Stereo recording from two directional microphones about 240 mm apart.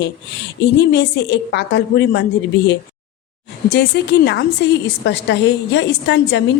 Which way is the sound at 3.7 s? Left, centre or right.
Left.